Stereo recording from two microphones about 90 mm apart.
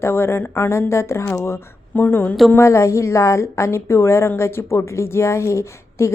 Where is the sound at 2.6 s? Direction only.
35° left (ahead or behind).